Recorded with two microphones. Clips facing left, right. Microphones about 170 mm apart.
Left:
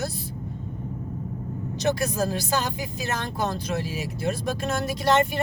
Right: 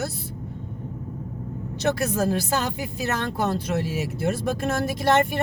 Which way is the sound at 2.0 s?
55° right (ahead or behind).